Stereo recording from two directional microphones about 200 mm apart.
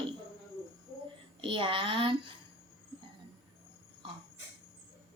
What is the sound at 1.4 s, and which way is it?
Speech, 25° right (ahead or behind).